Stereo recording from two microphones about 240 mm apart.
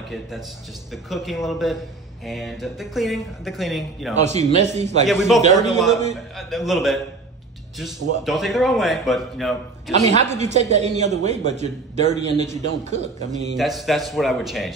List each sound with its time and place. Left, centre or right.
1.1 s speech: centre
4.1 s speech: right
5.0 s speech: centre
9.9 s speech: right
13.6 s speech: centre